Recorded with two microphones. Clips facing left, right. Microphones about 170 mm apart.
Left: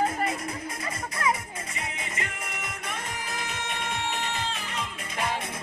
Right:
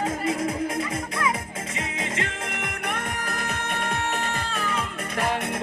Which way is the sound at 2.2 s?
80° right.